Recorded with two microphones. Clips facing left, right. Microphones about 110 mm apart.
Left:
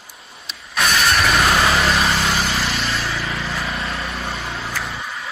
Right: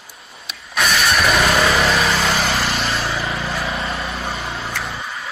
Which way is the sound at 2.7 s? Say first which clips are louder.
Right 2 dB; 30° right (ahead or behind).